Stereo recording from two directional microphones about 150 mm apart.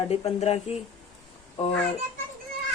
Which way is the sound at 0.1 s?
45° left (ahead or behind).